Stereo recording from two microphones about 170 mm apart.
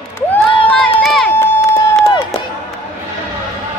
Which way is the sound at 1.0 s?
Centre (ahead or behind).